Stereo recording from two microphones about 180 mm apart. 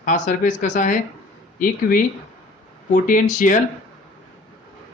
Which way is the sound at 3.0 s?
45° left (ahead or behind).